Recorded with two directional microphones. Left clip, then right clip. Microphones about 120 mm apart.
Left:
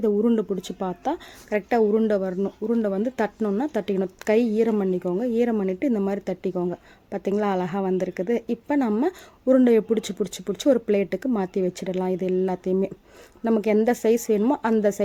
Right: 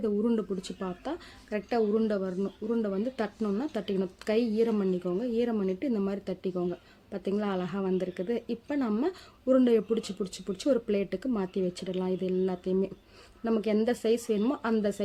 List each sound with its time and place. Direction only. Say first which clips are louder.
0.2 s a woman's voice: left 7 dB; 30° left (ahead or behind)